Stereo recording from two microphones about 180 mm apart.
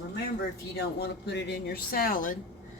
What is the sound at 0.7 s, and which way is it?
Speech, 65° left (ahead or behind).